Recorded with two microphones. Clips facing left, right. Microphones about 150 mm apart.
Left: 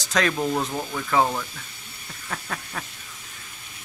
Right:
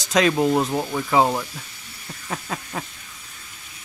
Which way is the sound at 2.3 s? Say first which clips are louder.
Right 3 dB; 20° right (ahead or behind).